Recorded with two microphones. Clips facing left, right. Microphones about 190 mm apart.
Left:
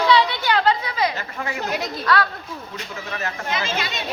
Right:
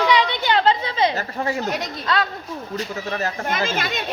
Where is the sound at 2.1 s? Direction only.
20° right (ahead or behind).